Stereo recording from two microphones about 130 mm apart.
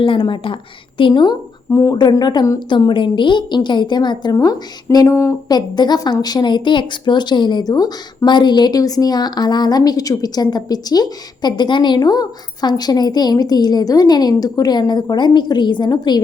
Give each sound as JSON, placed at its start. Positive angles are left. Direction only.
{"t": 0.0, "sound": "speech", "side_deg": 40}
{"t": 5.5, "sound": "speech", "side_deg": 35}